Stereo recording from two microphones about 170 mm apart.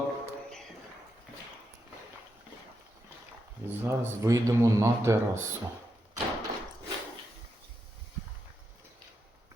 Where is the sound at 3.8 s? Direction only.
15° right (ahead or behind).